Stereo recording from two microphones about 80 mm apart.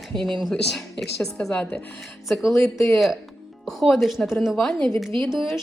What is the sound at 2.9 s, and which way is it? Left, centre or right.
A woman's voice, centre.